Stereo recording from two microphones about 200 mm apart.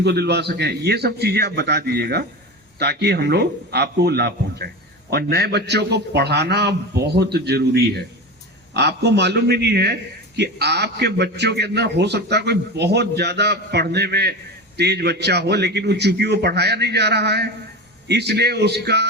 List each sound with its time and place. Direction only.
0.0 s a man's voice: 55° right (ahead or behind)